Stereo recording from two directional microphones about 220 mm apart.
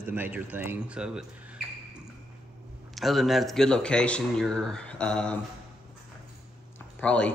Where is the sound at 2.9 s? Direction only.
Centre (ahead or behind).